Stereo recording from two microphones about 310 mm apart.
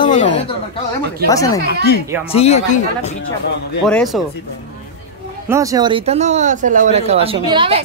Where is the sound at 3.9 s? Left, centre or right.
Centre.